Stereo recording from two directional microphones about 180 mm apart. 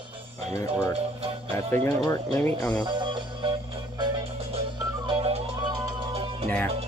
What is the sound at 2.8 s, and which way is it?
Music, 25° right (ahead or behind).